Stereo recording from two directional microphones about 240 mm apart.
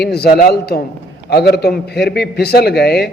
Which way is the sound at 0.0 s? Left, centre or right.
Left.